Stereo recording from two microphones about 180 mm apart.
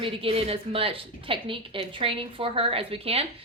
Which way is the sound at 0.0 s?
30° right (ahead or behind).